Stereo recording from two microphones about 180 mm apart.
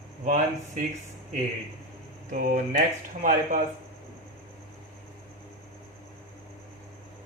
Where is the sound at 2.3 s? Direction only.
50° right (ahead or behind).